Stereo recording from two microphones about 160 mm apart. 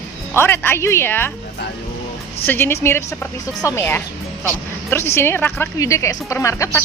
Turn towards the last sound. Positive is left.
turn(degrees=20)  # may be behind; listen again after turning